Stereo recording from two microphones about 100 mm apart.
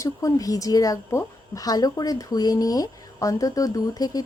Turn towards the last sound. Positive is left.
turn(degrees=40)  # may be behind; listen again after turning